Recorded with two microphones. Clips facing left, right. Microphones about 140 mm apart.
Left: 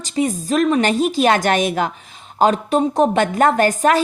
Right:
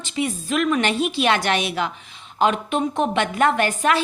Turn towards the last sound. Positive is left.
turn(degrees=40)  # may be behind; listen again after turning